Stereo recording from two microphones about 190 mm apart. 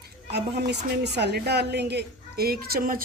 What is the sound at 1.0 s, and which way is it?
A woman's voice, 60° right (ahead or behind).